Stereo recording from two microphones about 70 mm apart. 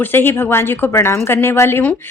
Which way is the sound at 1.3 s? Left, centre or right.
Left.